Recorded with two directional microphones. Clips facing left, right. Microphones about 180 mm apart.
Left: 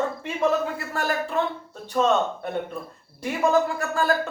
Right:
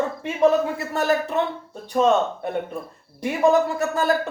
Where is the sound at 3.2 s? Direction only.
20° right (ahead or behind).